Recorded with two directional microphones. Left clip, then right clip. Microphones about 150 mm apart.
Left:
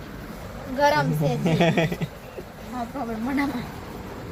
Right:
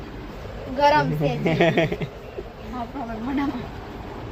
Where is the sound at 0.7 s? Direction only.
Centre (ahead or behind).